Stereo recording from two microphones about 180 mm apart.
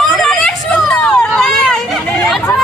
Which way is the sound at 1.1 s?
5° left (ahead or behind).